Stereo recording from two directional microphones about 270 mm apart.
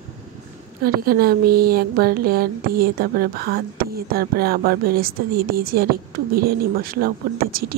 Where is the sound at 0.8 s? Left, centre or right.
Right.